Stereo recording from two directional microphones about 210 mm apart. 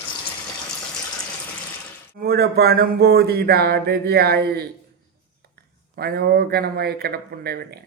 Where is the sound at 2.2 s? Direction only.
45° right (ahead or behind).